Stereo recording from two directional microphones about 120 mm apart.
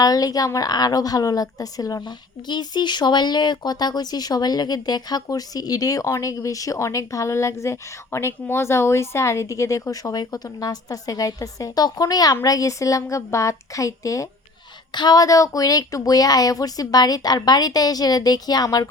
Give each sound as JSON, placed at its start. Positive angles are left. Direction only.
{"t": 0.0, "sound": "a woman's voice", "side_deg": 30}